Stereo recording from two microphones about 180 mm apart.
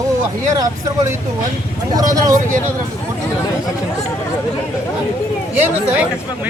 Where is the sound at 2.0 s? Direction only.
20° right (ahead or behind).